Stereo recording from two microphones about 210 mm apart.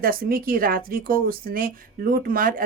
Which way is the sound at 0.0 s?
45° right (ahead or behind).